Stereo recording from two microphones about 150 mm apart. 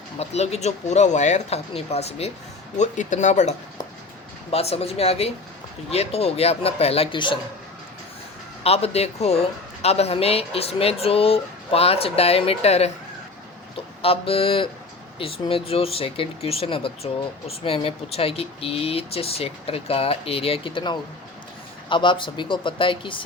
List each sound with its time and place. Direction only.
0.2 s speech: 45° left (ahead or behind)
4.5 s speech: 40° left (ahead or behind)
8.6 s speech: 45° left (ahead or behind)